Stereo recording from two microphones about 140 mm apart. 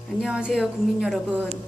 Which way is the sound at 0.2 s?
5° right (ahead or behind).